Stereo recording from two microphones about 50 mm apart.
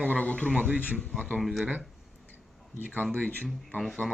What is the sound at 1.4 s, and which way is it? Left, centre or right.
Speech, centre.